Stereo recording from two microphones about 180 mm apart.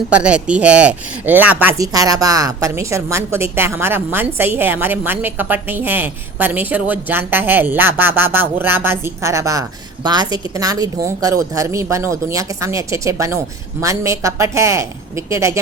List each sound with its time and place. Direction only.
0.1 s speech: 5° right (ahead or behind)